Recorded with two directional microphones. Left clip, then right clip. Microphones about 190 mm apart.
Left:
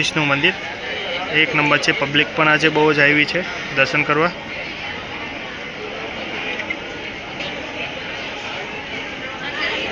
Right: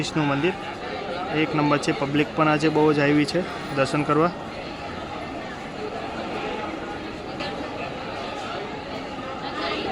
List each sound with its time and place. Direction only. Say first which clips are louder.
0.0 s speech: left 7 dB; 10° right (ahead or behind)